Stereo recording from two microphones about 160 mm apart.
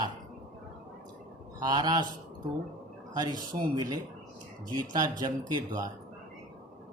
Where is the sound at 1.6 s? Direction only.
25° right (ahead or behind).